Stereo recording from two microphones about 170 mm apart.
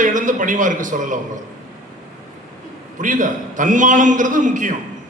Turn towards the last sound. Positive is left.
turn(degrees=-50)  # may be behind; listen again after turning